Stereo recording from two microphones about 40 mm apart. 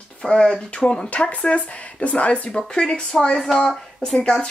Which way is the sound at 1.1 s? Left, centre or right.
Left.